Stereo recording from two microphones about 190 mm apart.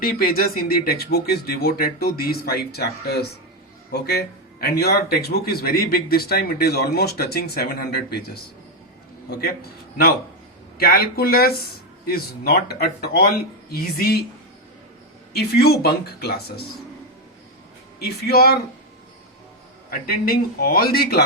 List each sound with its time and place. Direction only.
0.0 s speech: 50° left (ahead or behind)
10.8 s speech: 55° left (ahead or behind)
15.3 s speech: 55° left (ahead or behind)
18.0 s speech: 55° left (ahead or behind)
19.9 s speech: 50° left (ahead or behind)